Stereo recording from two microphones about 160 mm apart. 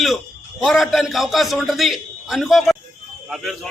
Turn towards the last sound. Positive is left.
turn(degrees=0)  # may be behind; listen again after turning